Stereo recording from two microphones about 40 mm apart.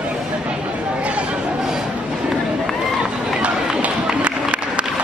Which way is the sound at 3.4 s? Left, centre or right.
Right.